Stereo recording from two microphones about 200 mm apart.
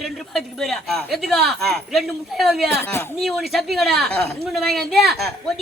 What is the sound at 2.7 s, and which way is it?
Speech, 10° left (ahead or behind).